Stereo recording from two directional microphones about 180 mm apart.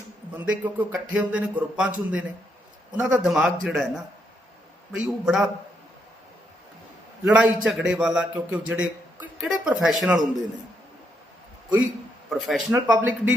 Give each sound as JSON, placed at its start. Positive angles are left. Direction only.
{"t": 0.3, "sound": "a man's voice", "side_deg": -10}
{"t": 5.0, "sound": "a man's voice", "side_deg": 0}
{"t": 7.3, "sound": "a man's voice", "side_deg": -5}
{"t": 12.3, "sound": "a man's voice", "side_deg": 0}